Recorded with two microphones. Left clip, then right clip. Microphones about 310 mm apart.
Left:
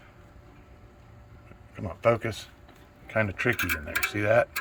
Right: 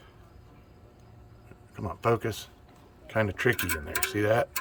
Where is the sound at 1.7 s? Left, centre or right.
Right.